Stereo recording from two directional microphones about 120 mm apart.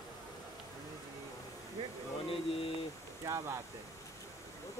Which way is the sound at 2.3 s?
50° left (ahead or behind).